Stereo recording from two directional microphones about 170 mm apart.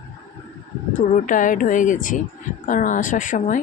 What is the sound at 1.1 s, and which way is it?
A woman's voice, 50° left (ahead or behind).